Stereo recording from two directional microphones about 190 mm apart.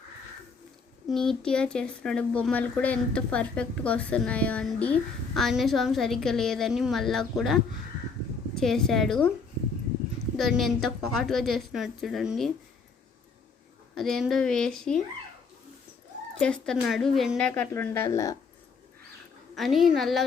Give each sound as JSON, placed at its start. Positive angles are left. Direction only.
{"t": 1.0, "sound": "speech", "side_deg": 0}
{"t": 10.3, "sound": "speech", "side_deg": 0}
{"t": 13.9, "sound": "speech", "side_deg": 0}
{"t": 16.4, "sound": "a woman's voice", "side_deg": 5}
{"t": 19.5, "sound": "speech", "side_deg": 0}